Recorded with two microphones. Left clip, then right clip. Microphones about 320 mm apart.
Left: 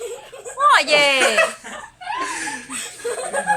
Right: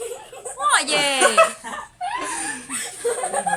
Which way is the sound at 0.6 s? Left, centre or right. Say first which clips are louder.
Left 5 dB; centre.